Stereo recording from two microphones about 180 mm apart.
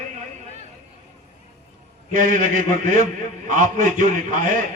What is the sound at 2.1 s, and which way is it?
A man's voice, 45° right (ahead or behind).